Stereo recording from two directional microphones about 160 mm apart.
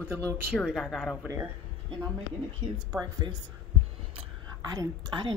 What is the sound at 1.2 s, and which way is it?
Speech, 20° right (ahead or behind).